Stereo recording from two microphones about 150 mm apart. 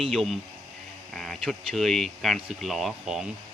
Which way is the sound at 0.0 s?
Centre (ahead or behind).